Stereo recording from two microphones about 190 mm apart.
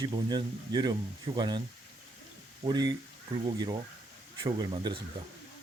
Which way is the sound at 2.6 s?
20° right (ahead or behind).